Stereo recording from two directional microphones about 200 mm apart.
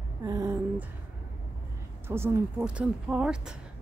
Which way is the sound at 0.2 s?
15° right (ahead or behind).